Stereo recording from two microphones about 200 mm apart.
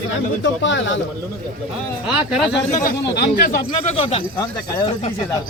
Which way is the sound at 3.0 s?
55° left (ahead or behind).